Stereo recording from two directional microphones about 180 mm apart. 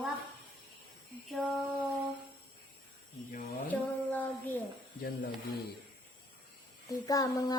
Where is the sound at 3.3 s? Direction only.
50° left (ahead or behind).